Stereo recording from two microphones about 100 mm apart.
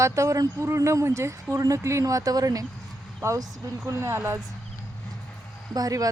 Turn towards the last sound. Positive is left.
turn(degrees=-35)  # may be behind; listen again after turning